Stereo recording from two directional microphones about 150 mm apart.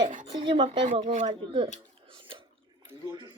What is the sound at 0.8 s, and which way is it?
Speech, 55° right (ahead or behind).